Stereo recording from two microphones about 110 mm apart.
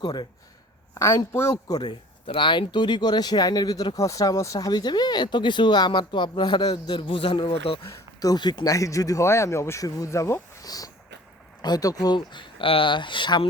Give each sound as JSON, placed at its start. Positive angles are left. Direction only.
{"t": 0.0, "sound": "speech", "side_deg": 40}
{"t": 0.9, "sound": "a man's voice", "side_deg": 25}
{"t": 1.9, "sound": "speech", "side_deg": 50}
{"t": 7.9, "sound": "speech", "side_deg": 35}